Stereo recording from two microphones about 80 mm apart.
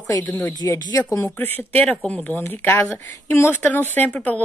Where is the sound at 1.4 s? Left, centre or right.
Left.